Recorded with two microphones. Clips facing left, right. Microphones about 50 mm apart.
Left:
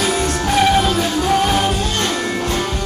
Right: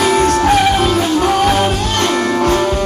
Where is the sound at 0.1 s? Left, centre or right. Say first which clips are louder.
Right 6 dB; right.